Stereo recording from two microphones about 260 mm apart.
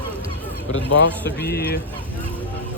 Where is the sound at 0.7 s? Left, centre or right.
Left.